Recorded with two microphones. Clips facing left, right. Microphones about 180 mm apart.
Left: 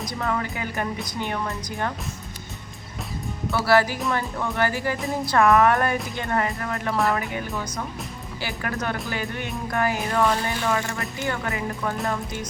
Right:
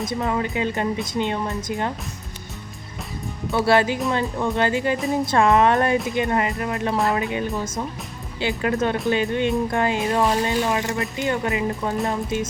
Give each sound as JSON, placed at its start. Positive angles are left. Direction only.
{"t": 0.1, "sound": "speech", "side_deg": -20}
{"t": 3.5, "sound": "speech", "side_deg": -25}